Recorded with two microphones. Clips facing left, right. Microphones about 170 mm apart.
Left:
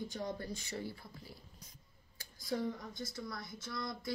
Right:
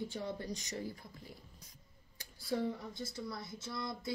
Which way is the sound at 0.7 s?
30° left (ahead or behind).